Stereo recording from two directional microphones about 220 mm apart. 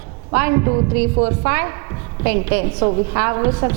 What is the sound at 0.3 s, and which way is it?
A woman's voice, 15° right (ahead or behind).